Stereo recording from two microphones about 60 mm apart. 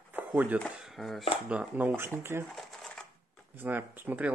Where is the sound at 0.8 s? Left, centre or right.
Centre.